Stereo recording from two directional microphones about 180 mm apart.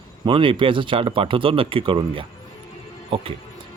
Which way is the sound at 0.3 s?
30° right (ahead or behind).